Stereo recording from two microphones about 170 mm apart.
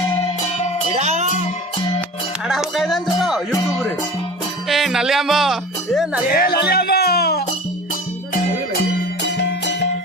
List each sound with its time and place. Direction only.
0.9 s music: 40° right (ahead or behind)
2.5 s speech: centre (ahead or behind)
6.3 s speech: 65° left (ahead or behind)
9.2 s music: 90° left